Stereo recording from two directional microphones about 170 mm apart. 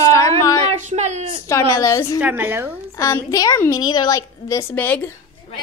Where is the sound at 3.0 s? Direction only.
15° left (ahead or behind).